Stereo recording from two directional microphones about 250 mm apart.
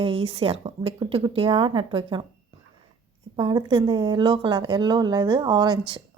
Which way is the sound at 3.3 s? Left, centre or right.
Centre.